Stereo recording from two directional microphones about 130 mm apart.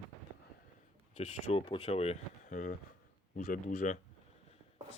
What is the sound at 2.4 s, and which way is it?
Speech, 75° left (ahead or behind).